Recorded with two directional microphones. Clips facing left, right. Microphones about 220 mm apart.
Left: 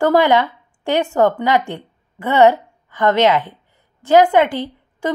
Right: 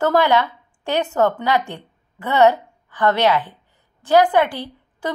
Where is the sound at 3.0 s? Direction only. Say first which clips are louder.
Left 3 dB; 15° left (ahead or behind).